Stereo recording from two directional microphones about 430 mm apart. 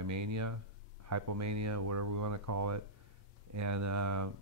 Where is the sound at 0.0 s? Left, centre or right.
Right.